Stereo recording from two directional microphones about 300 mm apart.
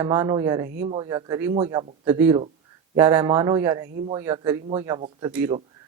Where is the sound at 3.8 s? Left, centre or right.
Right.